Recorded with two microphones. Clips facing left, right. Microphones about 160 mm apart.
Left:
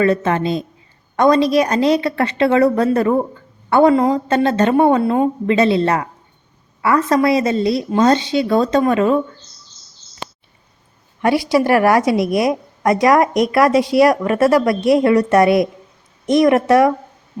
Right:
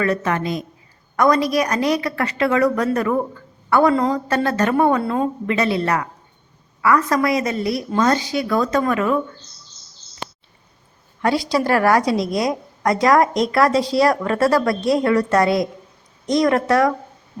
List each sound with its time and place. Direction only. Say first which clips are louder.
0.0 s speech: left 5 dB; 25° left (ahead or behind)
11.5 s speech: left 3 dB; 20° left (ahead or behind)